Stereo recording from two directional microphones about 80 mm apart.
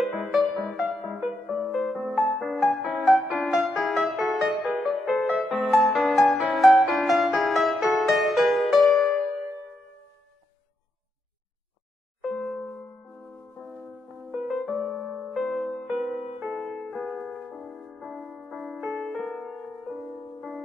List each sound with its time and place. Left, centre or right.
0.0 s music: centre
1.7 s music: centre
12.3 s a sound: centre
14.3 s music: centre
14.9 s music: centre
15.3 s music: centre
16.3 s music: right
16.5 s music: centre
18.0 s music: centre
18.9 s music: centre
19.2 s music: centre